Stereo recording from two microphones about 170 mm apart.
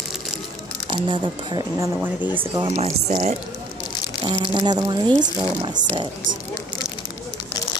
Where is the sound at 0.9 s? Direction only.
30° right (ahead or behind).